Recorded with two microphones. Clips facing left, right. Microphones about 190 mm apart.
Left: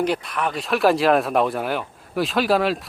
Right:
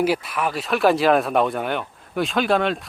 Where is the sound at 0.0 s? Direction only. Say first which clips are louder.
Right 1 dB; 5° right (ahead or behind).